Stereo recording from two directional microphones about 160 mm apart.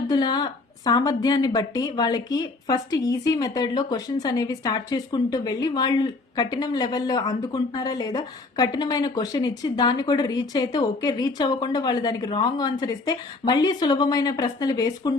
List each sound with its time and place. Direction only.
0.1 s a woman's voice: 25° left (ahead or behind)